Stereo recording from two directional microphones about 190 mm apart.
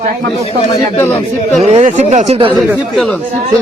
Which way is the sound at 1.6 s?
35° right (ahead or behind).